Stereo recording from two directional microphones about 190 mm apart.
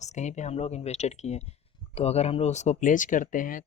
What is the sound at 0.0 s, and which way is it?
Speech, 40° left (ahead or behind).